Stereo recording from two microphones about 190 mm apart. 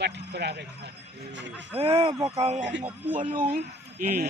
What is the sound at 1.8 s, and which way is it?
A man's voice, 35° right (ahead or behind).